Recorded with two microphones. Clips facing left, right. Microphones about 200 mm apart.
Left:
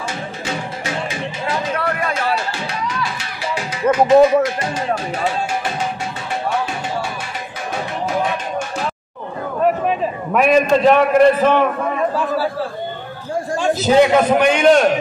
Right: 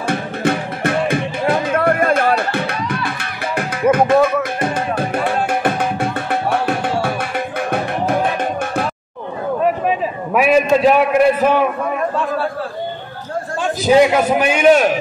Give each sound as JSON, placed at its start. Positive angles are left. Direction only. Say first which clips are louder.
{"t": 0.0, "sound": "music", "louder": "right 8 dB", "side_deg": -60}
{"t": 9.6, "sound": "a sound", "louder": "left 1 dB", "side_deg": -5}
{"t": 13.7, "sound": "a man's voice", "louder": "right 1 dB", "side_deg": -10}